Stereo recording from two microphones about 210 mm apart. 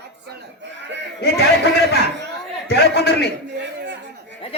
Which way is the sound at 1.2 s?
50° left (ahead or behind).